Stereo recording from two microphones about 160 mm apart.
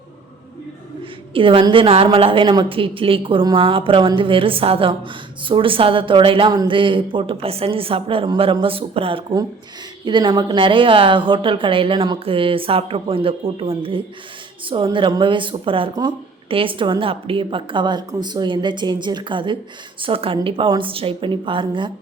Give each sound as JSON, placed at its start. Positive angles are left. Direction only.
{"t": 1.3, "sound": "a woman's voice", "side_deg": -35}